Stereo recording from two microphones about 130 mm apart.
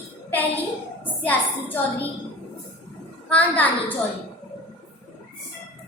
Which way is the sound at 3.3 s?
10° left (ahead or behind).